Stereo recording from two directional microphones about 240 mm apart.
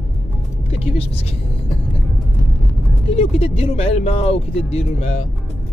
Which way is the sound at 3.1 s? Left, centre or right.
Left.